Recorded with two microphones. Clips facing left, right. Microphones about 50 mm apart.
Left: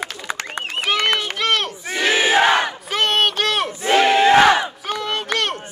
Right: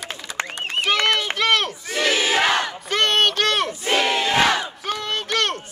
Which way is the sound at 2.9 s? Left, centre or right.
Centre.